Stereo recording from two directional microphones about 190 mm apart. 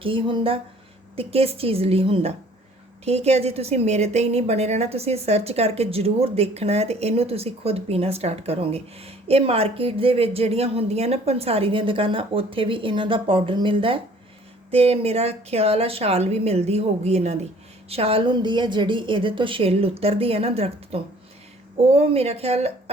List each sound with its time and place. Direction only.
0.0 s a woman's voice: 25° right (ahead or behind)